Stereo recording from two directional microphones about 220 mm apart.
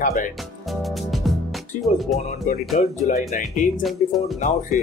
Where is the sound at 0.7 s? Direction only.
Centre (ahead or behind).